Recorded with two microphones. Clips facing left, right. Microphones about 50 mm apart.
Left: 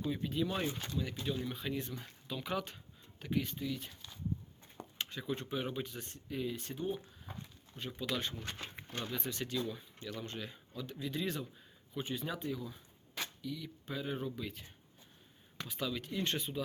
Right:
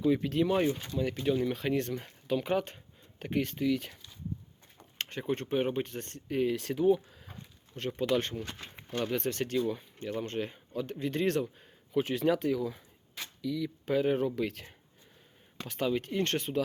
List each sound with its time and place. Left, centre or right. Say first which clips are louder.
0.0 s speech: right 8 dB; right
0.9 s speech: right 10 dB; right
2.2 s speech: right 9 dB; right
4.9 s speech: right 6 dB; right
7.9 s speech: right 9 dB; right
13.8 s speech: right 11 dB; right
15.8 s speech: right 8 dB; right